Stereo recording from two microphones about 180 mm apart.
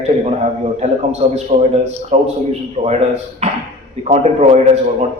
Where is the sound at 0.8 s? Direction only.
40° right (ahead or behind).